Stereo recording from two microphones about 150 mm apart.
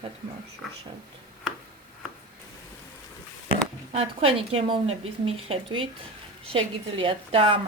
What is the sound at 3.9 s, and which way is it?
Speech, 40° right (ahead or behind).